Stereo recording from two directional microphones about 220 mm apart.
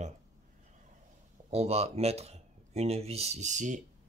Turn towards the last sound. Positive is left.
turn(degrees=-35)  # may be behind; listen again after turning